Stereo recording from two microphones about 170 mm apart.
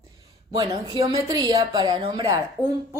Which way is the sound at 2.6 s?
10° left (ahead or behind).